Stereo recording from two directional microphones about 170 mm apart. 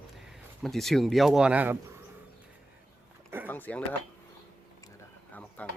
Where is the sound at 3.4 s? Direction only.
10° left (ahead or behind).